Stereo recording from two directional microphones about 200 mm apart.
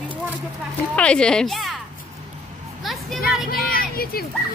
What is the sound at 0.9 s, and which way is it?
Speech, 5° left (ahead or behind).